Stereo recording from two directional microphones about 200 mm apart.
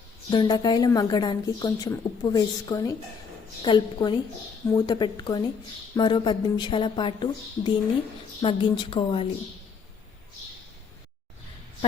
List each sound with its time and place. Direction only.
0.3 s a woman's voice: 20° left (ahead or behind)